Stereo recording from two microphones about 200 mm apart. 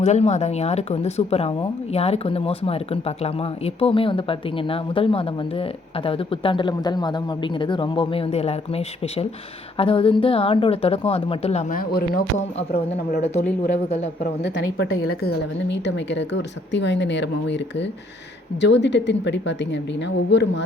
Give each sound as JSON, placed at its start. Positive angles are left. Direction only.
{"t": 0.0, "sound": "speech", "side_deg": 35}
{"t": 11.7, "sound": "speech", "side_deg": 50}
{"t": 13.8, "sound": "a man's voice", "side_deg": 30}
{"t": 14.4, "sound": "speech", "side_deg": 65}